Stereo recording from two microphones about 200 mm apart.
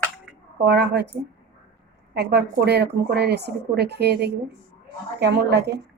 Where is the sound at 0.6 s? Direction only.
55° right (ahead or behind).